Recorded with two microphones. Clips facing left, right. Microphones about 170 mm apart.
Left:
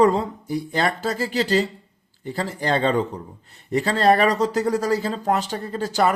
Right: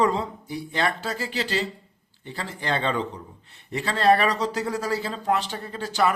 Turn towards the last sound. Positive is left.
turn(degrees=40)  # may be behind; listen again after turning